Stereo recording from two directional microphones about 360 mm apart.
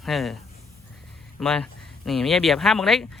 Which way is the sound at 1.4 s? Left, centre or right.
Centre.